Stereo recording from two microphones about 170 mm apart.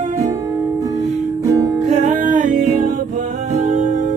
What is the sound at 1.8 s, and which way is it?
Music, 45° right (ahead or behind).